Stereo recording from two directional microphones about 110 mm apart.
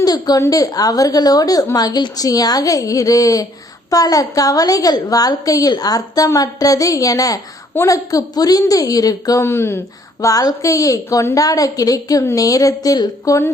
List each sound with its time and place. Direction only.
0.0 s a woman's voice: 35° left (ahead or behind)